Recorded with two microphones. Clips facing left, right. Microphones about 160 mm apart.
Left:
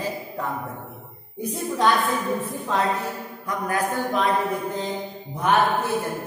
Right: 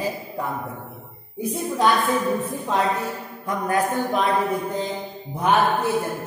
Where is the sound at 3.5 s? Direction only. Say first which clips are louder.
Right 3 dB; 25° right (ahead or behind).